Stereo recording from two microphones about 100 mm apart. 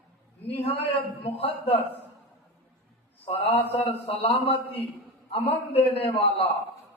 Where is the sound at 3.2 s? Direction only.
85° left.